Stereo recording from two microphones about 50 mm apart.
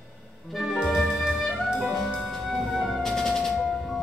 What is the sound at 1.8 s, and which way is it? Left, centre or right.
Music, centre.